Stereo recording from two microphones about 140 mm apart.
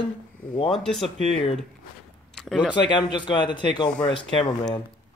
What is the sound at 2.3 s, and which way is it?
Speech, centre (ahead or behind).